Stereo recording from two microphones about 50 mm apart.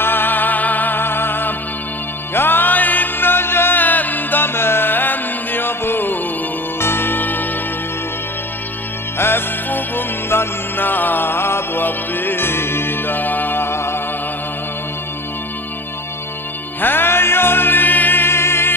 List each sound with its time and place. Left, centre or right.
0.0 s music: left
9.7 s music: left
16.8 s music: left